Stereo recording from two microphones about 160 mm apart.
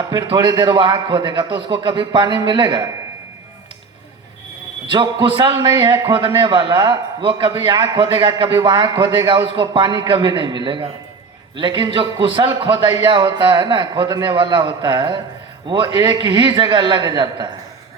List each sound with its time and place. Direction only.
0.0 s a man's voice: 25° right (ahead or behind)
4.9 s a man's voice: 30° right (ahead or behind)